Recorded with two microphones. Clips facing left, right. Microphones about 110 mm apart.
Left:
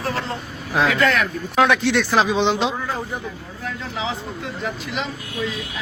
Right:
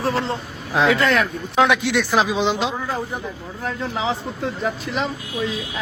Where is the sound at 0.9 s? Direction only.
25° right (ahead or behind).